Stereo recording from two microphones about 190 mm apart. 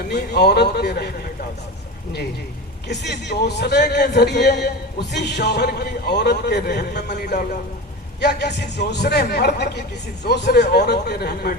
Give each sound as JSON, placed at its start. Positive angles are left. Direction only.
{"t": 0.1, "sound": "a man's voice", "side_deg": 60}
{"t": 2.8, "sound": "a man's voice", "side_deg": 60}